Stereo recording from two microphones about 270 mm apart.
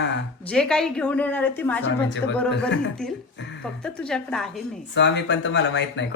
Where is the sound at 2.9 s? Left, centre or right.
Centre.